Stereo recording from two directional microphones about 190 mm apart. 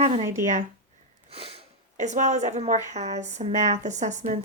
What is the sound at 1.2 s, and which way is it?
Sniff, 30° right (ahead or behind).